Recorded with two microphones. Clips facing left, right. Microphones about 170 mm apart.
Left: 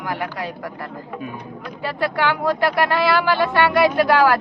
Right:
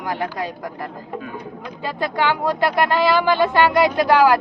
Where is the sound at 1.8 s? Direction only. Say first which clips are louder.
Even; 20° right (ahead or behind).